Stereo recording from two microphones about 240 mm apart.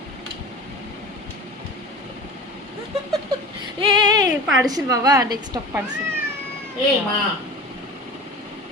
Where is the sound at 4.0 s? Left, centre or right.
Centre.